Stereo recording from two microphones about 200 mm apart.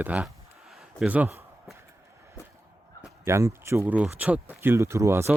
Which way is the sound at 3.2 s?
15° right (ahead or behind).